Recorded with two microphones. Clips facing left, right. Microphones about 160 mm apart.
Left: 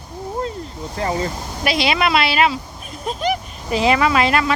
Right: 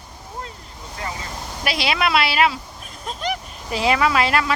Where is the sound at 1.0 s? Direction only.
30° left (ahead or behind).